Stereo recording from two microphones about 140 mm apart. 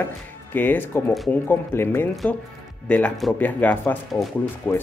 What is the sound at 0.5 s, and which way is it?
Speech, 15° left (ahead or behind).